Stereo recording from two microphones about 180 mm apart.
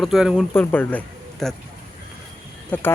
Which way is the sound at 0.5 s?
10° left (ahead or behind).